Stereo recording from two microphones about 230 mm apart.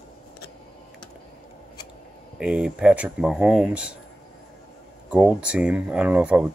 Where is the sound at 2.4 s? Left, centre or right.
Centre.